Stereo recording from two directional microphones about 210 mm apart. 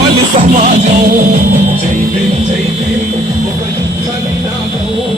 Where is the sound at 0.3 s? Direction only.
35° right (ahead or behind).